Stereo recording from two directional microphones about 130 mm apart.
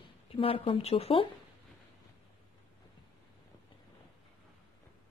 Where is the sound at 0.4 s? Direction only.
45° left (ahead or behind).